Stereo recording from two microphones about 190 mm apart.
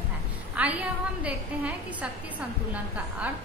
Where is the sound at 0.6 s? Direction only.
5° right (ahead or behind).